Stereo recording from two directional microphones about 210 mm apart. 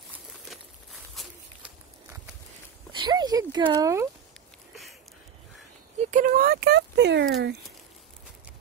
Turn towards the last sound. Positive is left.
turn(degrees=-55)  # may be behind; listen again after turning